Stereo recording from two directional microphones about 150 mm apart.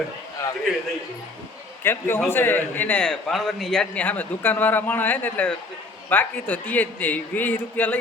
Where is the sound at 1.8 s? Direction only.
15° left (ahead or behind).